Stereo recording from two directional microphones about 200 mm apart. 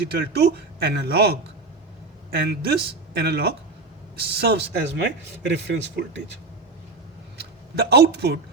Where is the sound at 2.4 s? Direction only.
60° right (ahead or behind).